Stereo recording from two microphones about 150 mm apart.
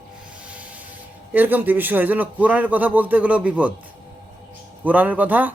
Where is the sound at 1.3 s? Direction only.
10° right (ahead or behind).